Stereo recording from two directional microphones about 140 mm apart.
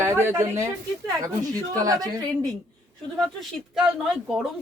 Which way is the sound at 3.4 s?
5° right (ahead or behind).